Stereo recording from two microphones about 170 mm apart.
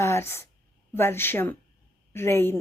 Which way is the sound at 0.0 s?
15° left (ahead or behind).